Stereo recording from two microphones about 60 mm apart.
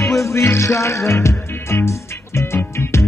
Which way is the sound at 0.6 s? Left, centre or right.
Left.